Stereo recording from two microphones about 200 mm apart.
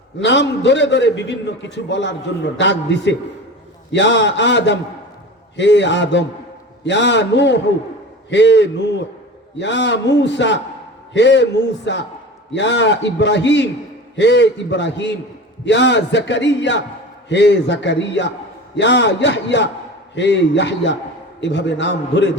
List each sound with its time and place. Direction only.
0.2 s a man's voice: 60° left (ahead or behind)